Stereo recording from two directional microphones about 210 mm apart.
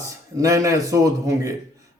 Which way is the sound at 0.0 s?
15° right (ahead or behind).